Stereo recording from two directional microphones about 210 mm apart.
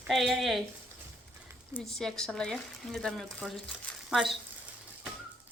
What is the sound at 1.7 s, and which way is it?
Speech, centre (ahead or behind).